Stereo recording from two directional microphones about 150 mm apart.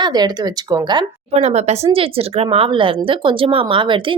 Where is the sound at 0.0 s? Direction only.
25° right (ahead or behind).